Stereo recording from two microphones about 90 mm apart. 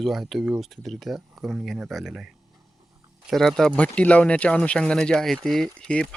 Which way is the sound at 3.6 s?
15° left (ahead or behind).